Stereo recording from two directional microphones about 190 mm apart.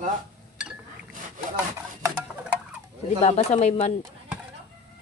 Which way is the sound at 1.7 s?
10° right (ahead or behind).